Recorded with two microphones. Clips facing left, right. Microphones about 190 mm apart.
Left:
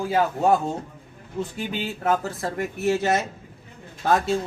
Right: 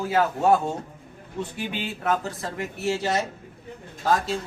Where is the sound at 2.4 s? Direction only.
45° left (ahead or behind).